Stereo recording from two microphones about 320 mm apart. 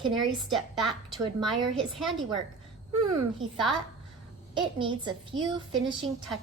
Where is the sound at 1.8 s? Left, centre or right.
Centre.